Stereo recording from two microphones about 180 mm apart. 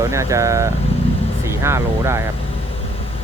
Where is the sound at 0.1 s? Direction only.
15° right (ahead or behind).